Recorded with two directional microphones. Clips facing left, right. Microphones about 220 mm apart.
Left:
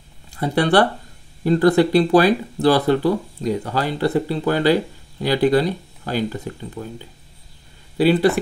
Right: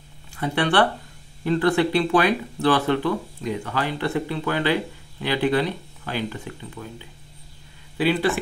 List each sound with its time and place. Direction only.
0.4 s speech: 40° left (ahead or behind)
8.0 s speech: 40° left (ahead or behind)